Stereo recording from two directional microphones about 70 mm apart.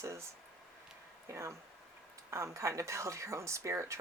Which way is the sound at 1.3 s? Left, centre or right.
Right.